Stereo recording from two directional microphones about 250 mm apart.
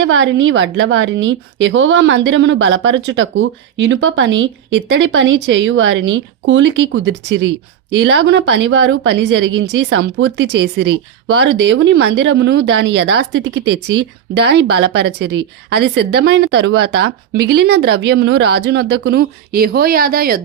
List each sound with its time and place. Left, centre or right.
0.0 s a woman's voice: right